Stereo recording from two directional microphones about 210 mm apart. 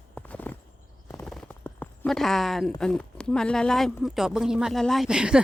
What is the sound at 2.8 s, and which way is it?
Speech, 5° left (ahead or behind).